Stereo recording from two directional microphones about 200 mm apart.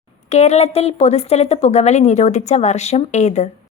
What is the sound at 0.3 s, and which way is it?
A woman's voice, 35° left (ahead or behind).